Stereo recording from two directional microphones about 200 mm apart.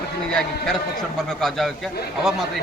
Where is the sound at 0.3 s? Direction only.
5° left (ahead or behind).